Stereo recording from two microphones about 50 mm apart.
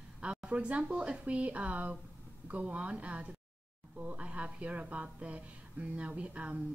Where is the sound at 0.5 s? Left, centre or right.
Right.